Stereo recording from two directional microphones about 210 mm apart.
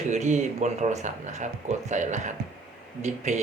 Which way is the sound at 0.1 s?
35° right (ahead or behind).